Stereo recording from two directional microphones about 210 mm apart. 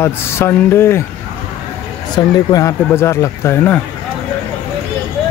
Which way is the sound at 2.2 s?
20° left (ahead or behind).